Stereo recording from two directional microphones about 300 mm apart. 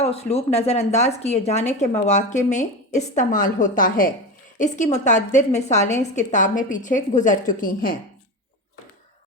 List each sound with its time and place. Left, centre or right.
0.0 s speech: centre